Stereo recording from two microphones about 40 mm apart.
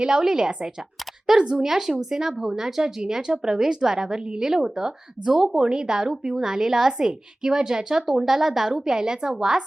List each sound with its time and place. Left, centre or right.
0.0 s speech: right